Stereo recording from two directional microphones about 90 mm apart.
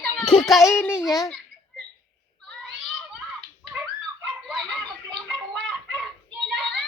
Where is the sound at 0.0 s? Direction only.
10° left (ahead or behind).